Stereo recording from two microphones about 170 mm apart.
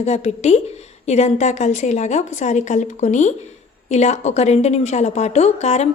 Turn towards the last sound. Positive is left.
turn(degrees=40)  # may be behind; listen again after turning